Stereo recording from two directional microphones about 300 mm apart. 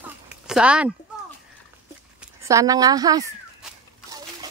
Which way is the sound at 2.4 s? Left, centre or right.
Centre.